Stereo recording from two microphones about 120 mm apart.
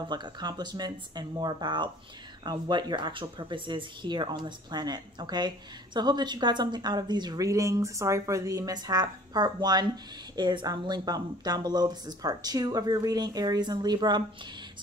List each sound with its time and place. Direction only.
0.1 s a woman's voice: 35° right (ahead or behind)